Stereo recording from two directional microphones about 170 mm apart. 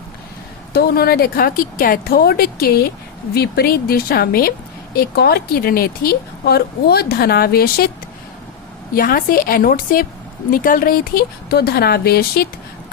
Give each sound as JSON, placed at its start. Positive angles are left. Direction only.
{"t": 0.7, "sound": "speech", "side_deg": 65}
{"t": 9.0, "sound": "speech", "side_deg": 60}